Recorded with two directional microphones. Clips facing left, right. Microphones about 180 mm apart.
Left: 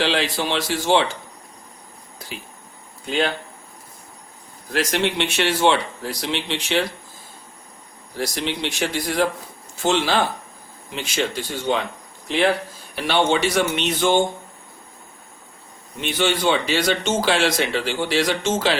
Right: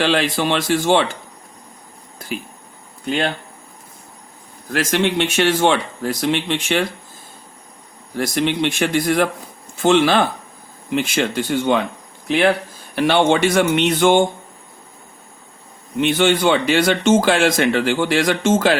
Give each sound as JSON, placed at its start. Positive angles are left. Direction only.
{"t": 0.0, "sound": "speech", "side_deg": -50}
{"t": 4.7, "sound": "speech", "side_deg": -50}
{"t": 8.2, "sound": "speech", "side_deg": -55}
{"t": 13.0, "sound": "speech", "side_deg": -55}
{"t": 16.0, "sound": "speech", "side_deg": -55}